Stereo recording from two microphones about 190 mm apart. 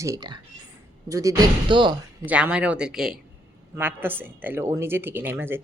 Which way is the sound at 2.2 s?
5° right (ahead or behind).